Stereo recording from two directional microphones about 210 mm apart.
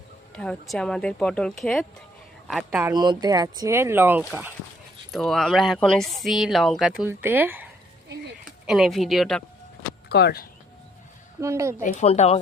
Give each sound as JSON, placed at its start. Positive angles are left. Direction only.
{"t": 0.3, "sound": "speech", "side_deg": 5}
{"t": 2.8, "sound": "speech", "side_deg": -20}
{"t": 10.1, "sound": "speech", "side_deg": 50}
{"t": 11.3, "sound": "speech", "side_deg": -15}
{"t": 11.8, "sound": "speech", "side_deg": 35}